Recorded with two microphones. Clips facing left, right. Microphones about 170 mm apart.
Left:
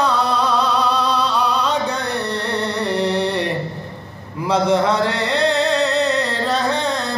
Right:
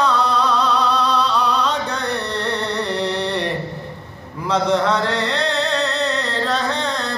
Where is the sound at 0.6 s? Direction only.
5° left (ahead or behind).